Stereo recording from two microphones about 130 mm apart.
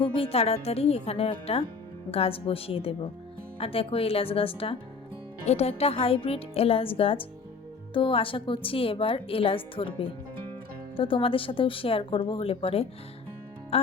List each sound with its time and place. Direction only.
0.2 s a woman's voice: 50° left (ahead or behind)